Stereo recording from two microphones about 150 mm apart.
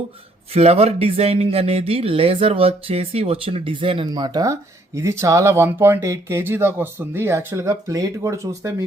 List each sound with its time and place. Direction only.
0.5 s speech: 45° right (ahead or behind); by 8.7 s 20° right (ahead or behind)